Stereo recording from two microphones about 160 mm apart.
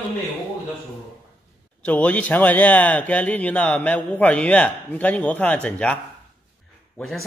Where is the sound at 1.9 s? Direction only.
10° left (ahead or behind).